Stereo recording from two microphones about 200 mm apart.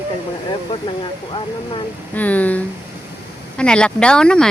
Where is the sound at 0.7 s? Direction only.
25° left (ahead or behind).